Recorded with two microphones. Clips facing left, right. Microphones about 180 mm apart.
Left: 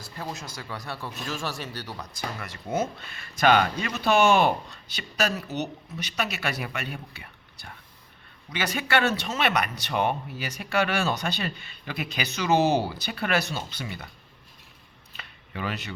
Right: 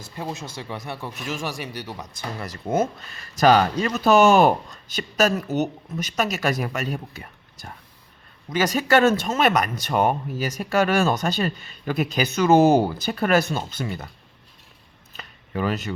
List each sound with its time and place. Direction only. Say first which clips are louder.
0.0 s speech: right 4 dB; 25° right (ahead or behind)
2.6 s speech: right 5 dB; 45° right (ahead or behind)
15.1 s a sound: right 9 dB; 45° right (ahead or behind)